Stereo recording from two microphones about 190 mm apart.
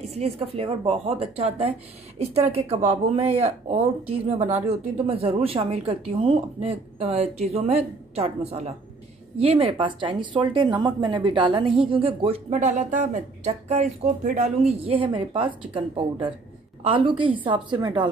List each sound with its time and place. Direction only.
0.1 s a woman's voice: 30° right (ahead or behind)
14.7 s speech: 30° right (ahead or behind)